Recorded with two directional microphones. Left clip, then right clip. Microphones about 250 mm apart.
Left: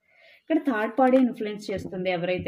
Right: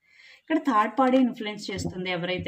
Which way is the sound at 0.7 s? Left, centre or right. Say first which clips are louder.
Right 1 dB; centre.